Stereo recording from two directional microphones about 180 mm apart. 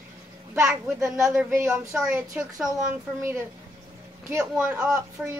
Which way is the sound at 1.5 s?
15° right (ahead or behind).